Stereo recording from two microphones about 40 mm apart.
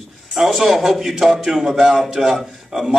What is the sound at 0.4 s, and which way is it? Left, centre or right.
A man's voice, centre.